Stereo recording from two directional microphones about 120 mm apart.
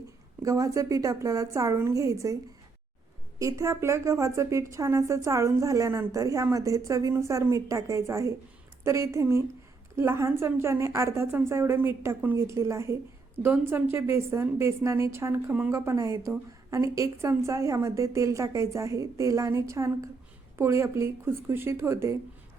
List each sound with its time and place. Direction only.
0.4 s a woman's voice: 30° right (ahead or behind)
3.3 s a woman's voice: 30° right (ahead or behind)